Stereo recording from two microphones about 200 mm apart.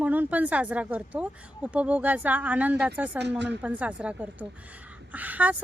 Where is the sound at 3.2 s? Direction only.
60° right (ahead or behind).